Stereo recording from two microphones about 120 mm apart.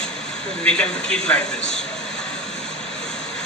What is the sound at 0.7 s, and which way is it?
A man's voice, 5° left (ahead or behind).